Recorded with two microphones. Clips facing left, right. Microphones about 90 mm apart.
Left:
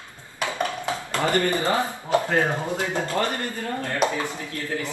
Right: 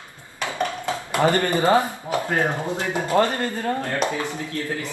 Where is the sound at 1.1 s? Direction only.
20° right (ahead or behind).